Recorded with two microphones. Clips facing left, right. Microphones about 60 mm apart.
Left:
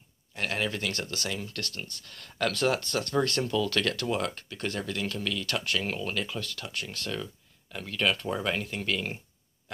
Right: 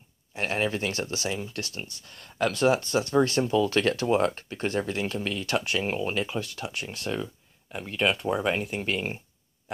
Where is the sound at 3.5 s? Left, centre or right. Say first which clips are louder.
Right 4 dB; right.